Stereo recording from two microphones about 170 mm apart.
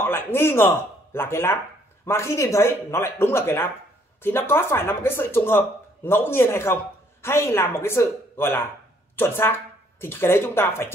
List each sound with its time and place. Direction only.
0.0 s speech: 15° left (ahead or behind)